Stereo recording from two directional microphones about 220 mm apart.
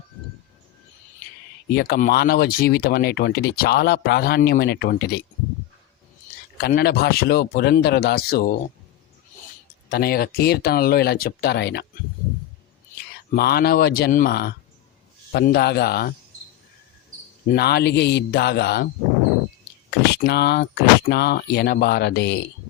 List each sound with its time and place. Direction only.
1.7 s speech: 45° left (ahead or behind)
6.6 s speech: 45° left (ahead or behind)
9.9 s speech: 45° left (ahead or behind)
13.3 s speech: 45° left (ahead or behind)
17.5 s speech: 45° left (ahead or behind)
19.9 s speech: 50° left (ahead or behind)